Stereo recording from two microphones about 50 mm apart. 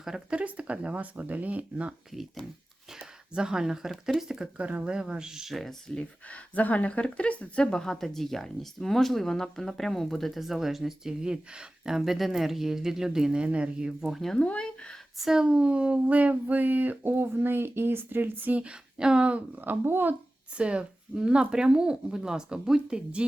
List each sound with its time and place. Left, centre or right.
0.3 s speech: right
3.3 s speech: centre
4.5 s speech: right; by 5.7 s centre
6.3 s speech: left
7.6 s speech: centre
13.4 s speech: right
14.3 s speech: left
15.2 s speech: centre
15.4 s speech: right
18.6 s speech: centre
19.6 s speech: right
20.6 s speech: right